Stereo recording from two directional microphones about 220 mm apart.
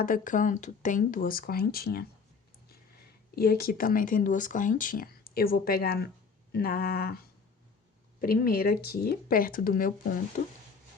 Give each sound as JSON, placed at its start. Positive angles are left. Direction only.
{"t": 0.0, "sound": "speech", "side_deg": 35}
{"t": 3.3, "sound": "speech", "side_deg": 45}